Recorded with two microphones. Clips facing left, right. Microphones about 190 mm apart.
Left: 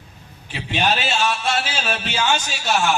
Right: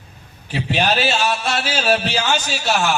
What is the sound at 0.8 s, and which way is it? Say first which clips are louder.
A man's voice: right 2 dB; 35° right (ahead or behind).